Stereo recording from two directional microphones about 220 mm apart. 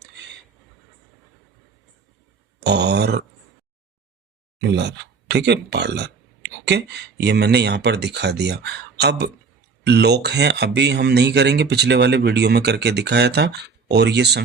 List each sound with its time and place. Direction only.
2.6 s speech: 50° right (ahead or behind)
4.6 s speech: 50° right (ahead or behind)